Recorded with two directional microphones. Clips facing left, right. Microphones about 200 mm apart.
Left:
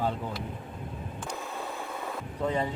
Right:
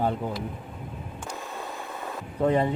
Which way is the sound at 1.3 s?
Centre (ahead or behind).